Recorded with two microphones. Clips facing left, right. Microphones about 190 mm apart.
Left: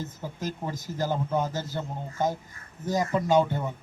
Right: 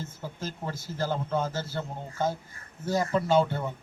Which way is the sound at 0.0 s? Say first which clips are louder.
Left 3 dB; 15° left (ahead or behind).